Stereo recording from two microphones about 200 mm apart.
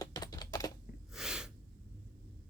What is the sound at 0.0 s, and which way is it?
Typing, 20° left (ahead or behind).